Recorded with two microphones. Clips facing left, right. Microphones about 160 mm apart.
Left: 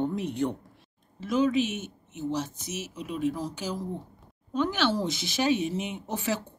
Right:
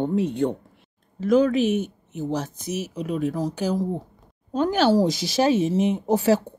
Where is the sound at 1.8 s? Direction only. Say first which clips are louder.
Right 4 dB; 40° right (ahead or behind).